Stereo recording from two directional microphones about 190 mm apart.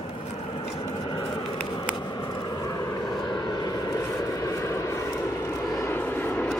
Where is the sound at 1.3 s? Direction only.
20° left (ahead or behind).